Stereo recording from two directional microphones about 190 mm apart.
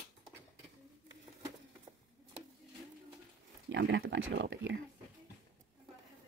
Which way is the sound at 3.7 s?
75° right (ahead or behind).